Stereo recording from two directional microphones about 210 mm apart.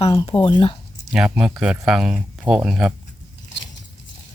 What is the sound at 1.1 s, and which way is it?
Speech, 5° right (ahead or behind).